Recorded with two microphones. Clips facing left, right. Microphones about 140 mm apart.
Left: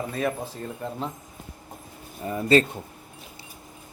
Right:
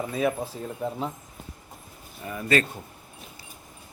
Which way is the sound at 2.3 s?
30° left (ahead or behind).